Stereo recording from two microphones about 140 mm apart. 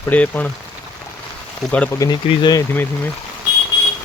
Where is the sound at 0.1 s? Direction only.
10° left (ahead or behind).